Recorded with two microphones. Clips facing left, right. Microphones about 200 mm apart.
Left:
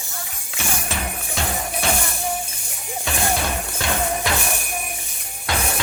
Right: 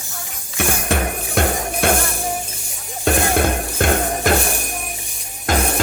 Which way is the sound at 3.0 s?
55° right (ahead or behind).